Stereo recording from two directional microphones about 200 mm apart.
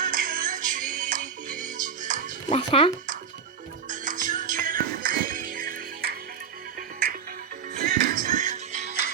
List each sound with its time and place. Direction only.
0.0 s music: 45° right (ahead or behind)
2.5 s speech: 25° left (ahead or behind)
3.8 s music: 40° right (ahead or behind)
7.9 s music: 45° right (ahead or behind)